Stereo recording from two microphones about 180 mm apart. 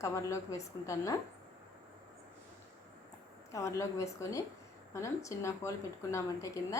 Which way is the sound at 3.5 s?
15° left (ahead or behind).